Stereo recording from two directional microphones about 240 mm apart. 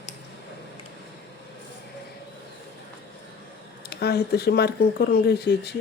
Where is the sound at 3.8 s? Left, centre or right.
Left.